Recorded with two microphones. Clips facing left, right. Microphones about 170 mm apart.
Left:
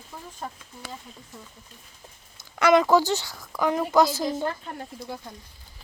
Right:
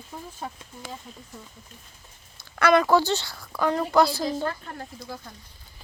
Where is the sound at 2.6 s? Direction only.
20° left (ahead or behind).